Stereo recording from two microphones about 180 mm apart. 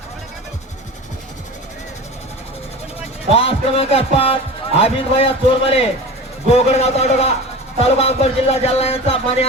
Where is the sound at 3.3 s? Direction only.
30° left (ahead or behind).